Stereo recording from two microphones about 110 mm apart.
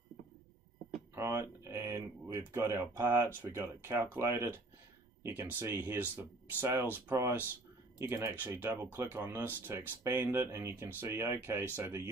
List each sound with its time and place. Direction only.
1.1 s speech: 25° right (ahead or behind)